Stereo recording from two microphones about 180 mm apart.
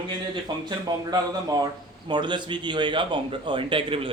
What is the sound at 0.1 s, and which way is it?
Speech, 25° right (ahead or behind).